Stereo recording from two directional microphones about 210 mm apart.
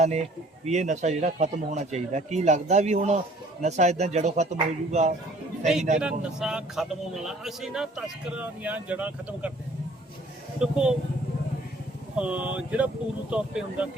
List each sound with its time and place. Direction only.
0.0 s speech: 30° right (ahead or behind)
6.0 s a man's voice: 5° right (ahead or behind)
10.6 s a man's voice: 5° right (ahead or behind)
12.1 s a man's voice: 5° right (ahead or behind)